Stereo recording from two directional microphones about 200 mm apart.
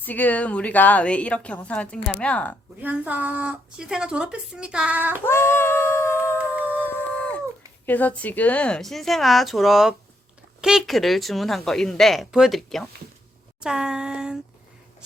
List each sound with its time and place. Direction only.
0.0 s a woman's voice: 10° left (ahead or behind)
2.8 s speech: 10° right (ahead or behind)
5.2 s singing: 10° left (ahead or behind)
6.7 s a sound: 10° left (ahead or behind)
7.9 s speech: 10° left (ahead or behind)